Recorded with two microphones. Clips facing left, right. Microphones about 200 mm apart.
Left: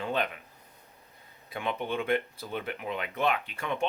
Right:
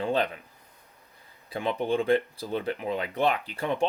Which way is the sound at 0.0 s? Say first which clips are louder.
Right 4 dB; 30° right (ahead or behind).